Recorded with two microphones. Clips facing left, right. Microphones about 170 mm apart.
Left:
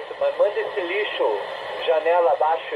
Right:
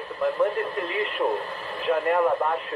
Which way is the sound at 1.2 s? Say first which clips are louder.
Left 4 dB; 25° left (ahead or behind).